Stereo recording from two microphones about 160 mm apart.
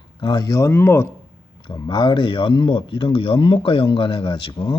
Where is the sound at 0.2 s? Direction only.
30° left (ahead or behind).